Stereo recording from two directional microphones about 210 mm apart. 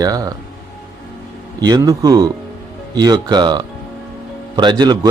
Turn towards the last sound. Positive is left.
turn(degrees=-20)  # may be behind; listen again after turning